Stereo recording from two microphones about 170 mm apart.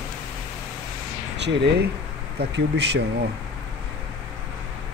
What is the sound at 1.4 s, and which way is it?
Speech, 90° right.